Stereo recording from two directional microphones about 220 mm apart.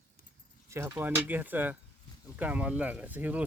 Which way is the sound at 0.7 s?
10° right (ahead or behind).